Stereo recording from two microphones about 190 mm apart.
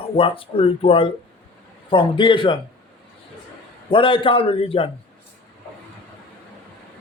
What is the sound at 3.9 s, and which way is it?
Speech, 25° left (ahead or behind).